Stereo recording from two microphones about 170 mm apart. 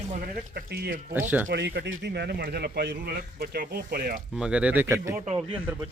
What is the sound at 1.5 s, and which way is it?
A man's voice, 85° right.